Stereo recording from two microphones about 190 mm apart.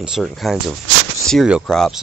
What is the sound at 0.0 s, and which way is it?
Speech, centre (ahead or behind).